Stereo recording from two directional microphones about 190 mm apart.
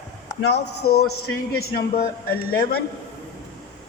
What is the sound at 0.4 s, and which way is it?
Speech, 60° left (ahead or behind).